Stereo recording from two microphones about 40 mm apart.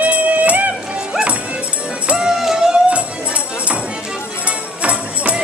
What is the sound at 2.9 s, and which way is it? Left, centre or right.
Music, right.